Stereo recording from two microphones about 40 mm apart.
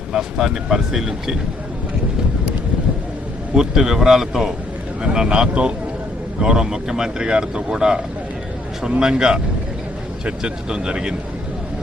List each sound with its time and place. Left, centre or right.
0.1 s speech: centre
3.5 s speech: centre
5.0 s speech: right
10.4 s speech: right